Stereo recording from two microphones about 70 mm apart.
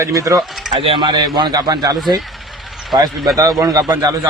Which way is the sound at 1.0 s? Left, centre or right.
Right.